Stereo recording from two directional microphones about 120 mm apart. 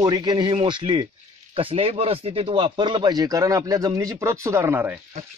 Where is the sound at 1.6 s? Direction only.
50° right (ahead or behind).